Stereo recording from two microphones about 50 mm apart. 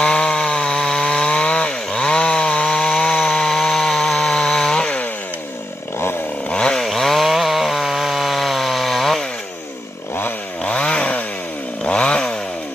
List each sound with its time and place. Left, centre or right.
0.0 s chainsaw: centre
6.5 s chainsaw: centre
10.6 s chainsaw: left